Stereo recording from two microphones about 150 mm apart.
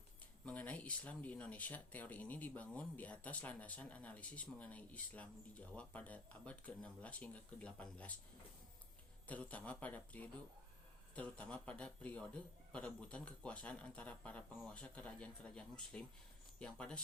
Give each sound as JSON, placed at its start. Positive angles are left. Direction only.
{"t": 0.4, "sound": "speech", "side_deg": 10}
{"t": 9.2, "sound": "speech", "side_deg": 10}